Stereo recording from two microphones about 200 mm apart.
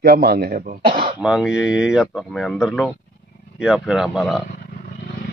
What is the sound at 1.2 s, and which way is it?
Speech, centre (ahead or behind).